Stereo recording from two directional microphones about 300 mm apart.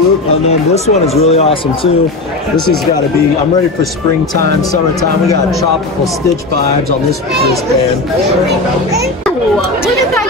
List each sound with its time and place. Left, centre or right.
1.2 s speech: centre
2.5 s speech: centre